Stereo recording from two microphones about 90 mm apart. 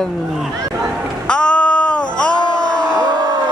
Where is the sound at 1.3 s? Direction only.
10° left (ahead or behind).